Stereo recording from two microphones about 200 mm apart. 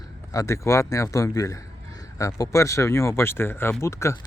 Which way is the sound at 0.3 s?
15° left (ahead or behind).